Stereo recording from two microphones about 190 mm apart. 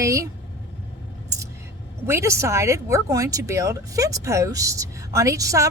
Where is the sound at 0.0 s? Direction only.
15° right (ahead or behind).